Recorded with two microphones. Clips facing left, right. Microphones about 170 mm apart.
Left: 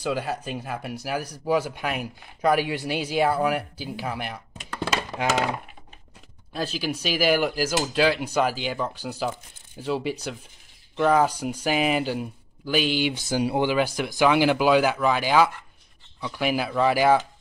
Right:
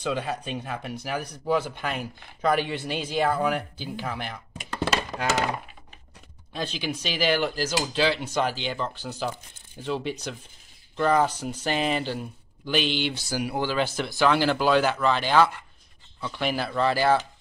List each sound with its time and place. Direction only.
0.0 s speech: 5° left (ahead or behind)
13.4 s speech: 25° left (ahead or behind)
13.7 s speech: 10° left (ahead or behind)